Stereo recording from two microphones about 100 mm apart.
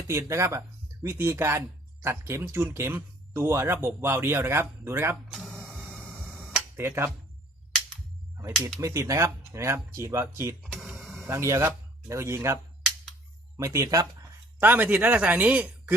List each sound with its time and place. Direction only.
0.1 s speech: 30° right (ahead or behind)
5.3 s music: centre (ahead or behind)
6.1 s a sound: 10° right (ahead or behind)
6.7 s speech: 25° right (ahead or behind)
8.8 s speech: 30° right (ahead or behind)
10.6 s a sound: 5° right (ahead or behind)
11.3 s speech: 30° right (ahead or behind)
13.6 s speech: 35° right (ahead or behind)
14.6 s a man's voice: 20° right (ahead or behind)